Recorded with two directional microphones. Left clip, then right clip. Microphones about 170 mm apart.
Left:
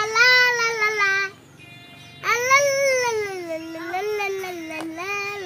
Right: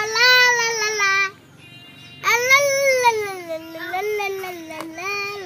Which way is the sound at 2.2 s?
Centre (ahead or behind).